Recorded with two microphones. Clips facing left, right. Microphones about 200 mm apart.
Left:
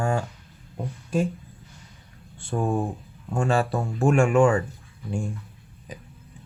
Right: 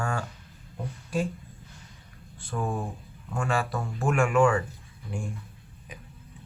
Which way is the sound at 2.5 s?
35° left (ahead or behind).